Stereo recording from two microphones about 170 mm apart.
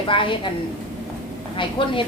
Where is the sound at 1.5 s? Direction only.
30° left (ahead or behind).